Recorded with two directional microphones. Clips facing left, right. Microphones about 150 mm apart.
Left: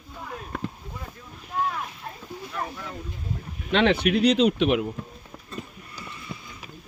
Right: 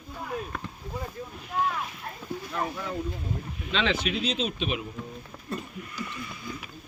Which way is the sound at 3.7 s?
60° left (ahead or behind).